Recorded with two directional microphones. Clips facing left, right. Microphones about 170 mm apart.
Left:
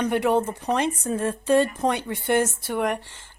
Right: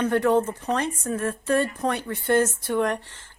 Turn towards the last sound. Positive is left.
turn(degrees=10)  # may be behind; listen again after turning